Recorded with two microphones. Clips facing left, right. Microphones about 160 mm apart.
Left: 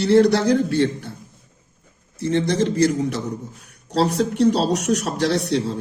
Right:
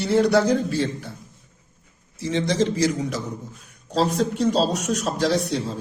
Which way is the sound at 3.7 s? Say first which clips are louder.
Left 2 dB; 70° left (ahead or behind).